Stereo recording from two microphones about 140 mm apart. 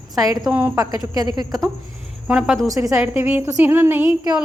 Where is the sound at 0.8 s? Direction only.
25° right (ahead or behind).